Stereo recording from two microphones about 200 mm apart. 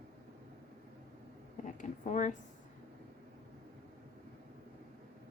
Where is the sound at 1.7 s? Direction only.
35° left (ahead or behind).